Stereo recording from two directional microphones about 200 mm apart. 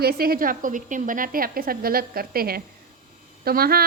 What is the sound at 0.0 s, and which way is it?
A woman's voice, 50° right (ahead or behind).